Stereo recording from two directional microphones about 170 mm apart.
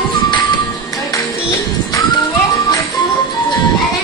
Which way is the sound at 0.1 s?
25° left (ahead or behind).